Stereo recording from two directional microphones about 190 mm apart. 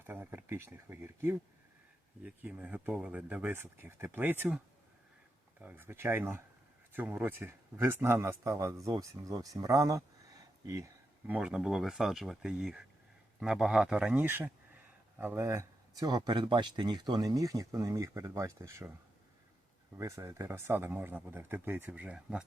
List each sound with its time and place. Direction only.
0.0 s speech: 10° right (ahead or behind)
11.3 s speech: 5° right (ahead or behind)
20.0 s speech: 15° right (ahead or behind)